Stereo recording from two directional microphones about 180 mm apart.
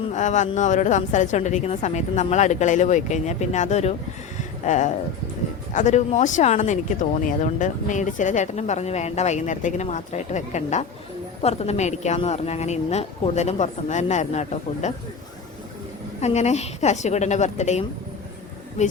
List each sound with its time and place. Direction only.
0.1 s speech: 40° left (ahead or behind)
16.2 s speech: 40° left (ahead or behind)